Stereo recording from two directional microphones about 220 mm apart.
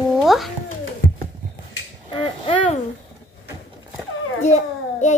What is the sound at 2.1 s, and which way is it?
Speech, 20° left (ahead or behind).